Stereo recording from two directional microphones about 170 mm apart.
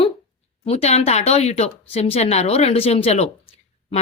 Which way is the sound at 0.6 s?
40° left (ahead or behind).